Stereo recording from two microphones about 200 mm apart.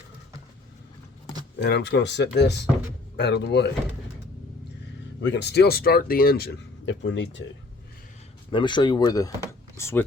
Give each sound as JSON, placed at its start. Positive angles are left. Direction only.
{"t": 1.5, "sound": "speech", "side_deg": 55}
{"t": 5.2, "sound": "speech", "side_deg": 60}
{"t": 8.4, "sound": "speech", "side_deg": 25}